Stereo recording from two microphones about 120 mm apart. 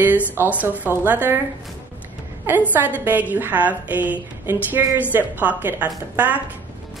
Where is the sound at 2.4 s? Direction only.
15° right (ahead or behind).